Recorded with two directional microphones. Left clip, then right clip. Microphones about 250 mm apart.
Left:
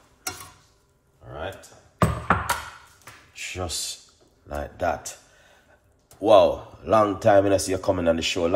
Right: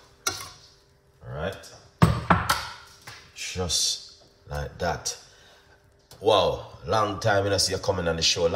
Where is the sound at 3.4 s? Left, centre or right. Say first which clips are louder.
Right 4 dB; centre.